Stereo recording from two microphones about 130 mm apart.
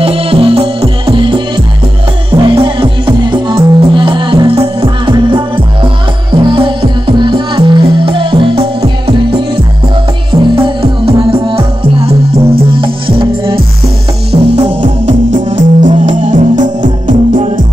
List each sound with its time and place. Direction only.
0.0 s music: 45° right (ahead or behind)
10.4 s music: 40° right (ahead or behind)
14.3 s music: 50° right (ahead or behind)
15.0 s music: 65° right (ahead or behind)